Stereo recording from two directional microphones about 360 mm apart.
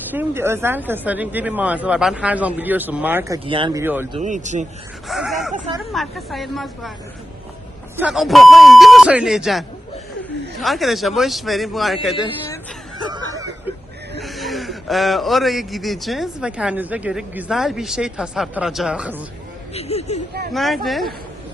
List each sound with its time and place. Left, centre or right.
0.1 s a man's voice: centre
4.2 s speech: centre
5.0 s a man's voice: centre
5.5 s speech: centre
5.8 s a man's voice: centre
7.9 s a man's voice: centre
13.1 s snicker: centre
14.2 s a man's voice: centre
19.7 s speech: centre
20.5 s a man's voice: centre